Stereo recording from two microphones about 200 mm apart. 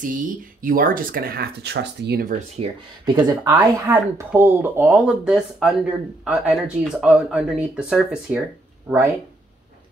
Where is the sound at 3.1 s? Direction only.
20° right (ahead or behind).